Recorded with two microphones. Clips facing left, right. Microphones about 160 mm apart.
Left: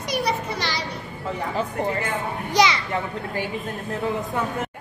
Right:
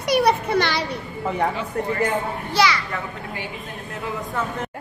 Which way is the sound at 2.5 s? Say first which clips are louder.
Left 1 dB; 20° left (ahead or behind).